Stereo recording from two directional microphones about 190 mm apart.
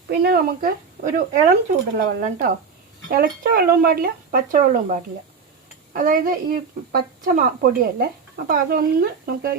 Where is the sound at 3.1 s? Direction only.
50° right (ahead or behind).